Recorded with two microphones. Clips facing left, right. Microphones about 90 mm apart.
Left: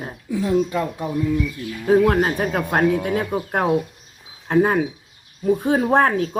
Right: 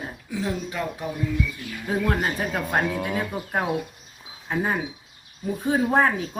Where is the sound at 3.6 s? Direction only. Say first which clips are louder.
Left 7 dB; 45° left (ahead or behind).